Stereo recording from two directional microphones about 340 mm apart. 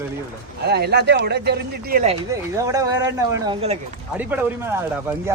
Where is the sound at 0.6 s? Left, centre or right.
Right.